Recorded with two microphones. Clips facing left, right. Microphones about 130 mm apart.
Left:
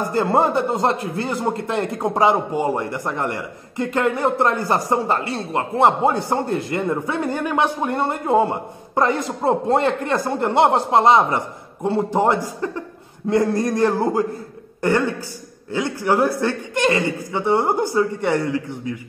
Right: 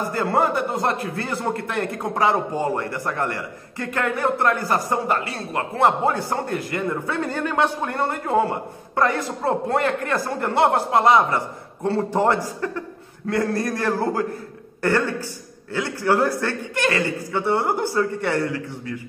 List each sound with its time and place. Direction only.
0.1 s a man's voice: 25° left (ahead or behind)